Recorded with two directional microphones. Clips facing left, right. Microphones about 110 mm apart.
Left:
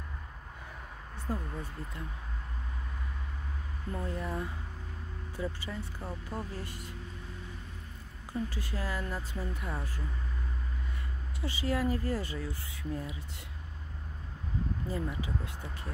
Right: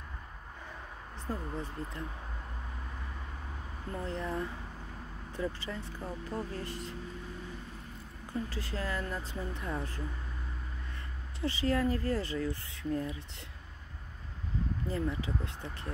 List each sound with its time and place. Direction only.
1.2 s speech: 10° left (ahead or behind)
4.0 s speech: 10° left (ahead or behind)
8.3 s speech: 15° left (ahead or behind)
11.4 s speech: 15° left (ahead or behind)
14.9 s speech: 15° left (ahead or behind)